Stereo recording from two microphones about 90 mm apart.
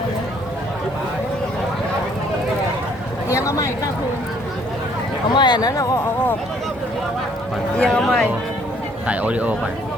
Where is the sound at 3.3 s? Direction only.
35° left (ahead or behind).